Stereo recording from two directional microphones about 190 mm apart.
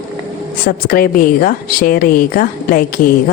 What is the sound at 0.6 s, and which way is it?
Speech, 50° left (ahead or behind).